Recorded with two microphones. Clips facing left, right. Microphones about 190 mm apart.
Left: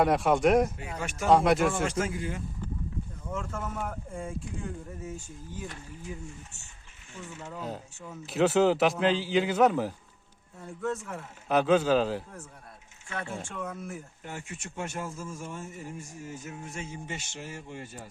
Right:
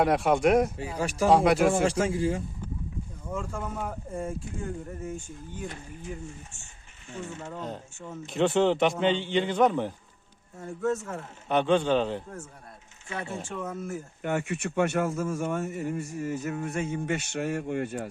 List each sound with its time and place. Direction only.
0.0 s a man's voice: centre (ahead or behind)
0.8 s a man's voice: 35° right (ahead or behind)
1.3 s a man's voice: centre (ahead or behind)
1.7 s a man's voice: 30° right (ahead or behind)
3.2 s a man's voice: 10° right (ahead or behind)
7.5 s a man's voice: 5° left (ahead or behind)
14.2 s speech: 70° right (ahead or behind)